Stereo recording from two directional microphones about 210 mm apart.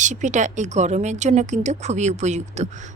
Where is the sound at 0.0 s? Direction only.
35° right (ahead or behind).